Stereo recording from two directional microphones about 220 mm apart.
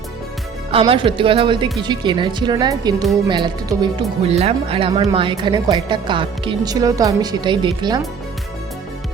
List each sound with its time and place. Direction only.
0.7 s speech: 25° right (ahead or behind)